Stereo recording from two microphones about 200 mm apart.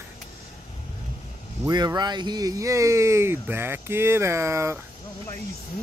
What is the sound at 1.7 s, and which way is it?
Speech, 20° right (ahead or behind).